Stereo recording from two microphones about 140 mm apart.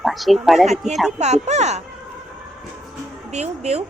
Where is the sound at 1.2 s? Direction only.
55° right (ahead or behind).